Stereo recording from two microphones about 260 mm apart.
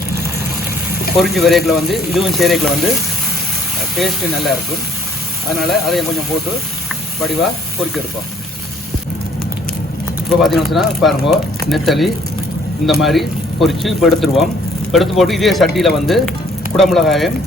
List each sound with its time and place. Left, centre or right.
1.1 s speech: centre
3.9 s speech: centre
10.2 s speech: centre